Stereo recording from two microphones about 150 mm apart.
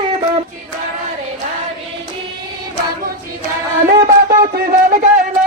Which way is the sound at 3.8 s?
75° right (ahead or behind).